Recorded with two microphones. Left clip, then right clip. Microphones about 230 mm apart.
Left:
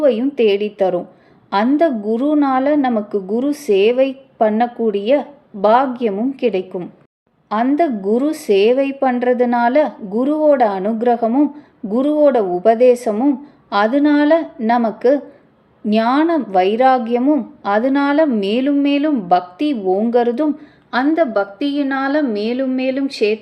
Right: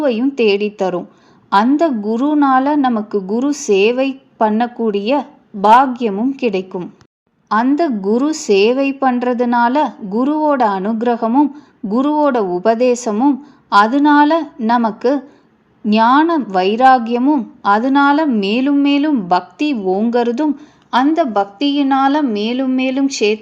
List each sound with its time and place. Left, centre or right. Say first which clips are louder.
0.0 s a woman's voice: left 1 dB; centre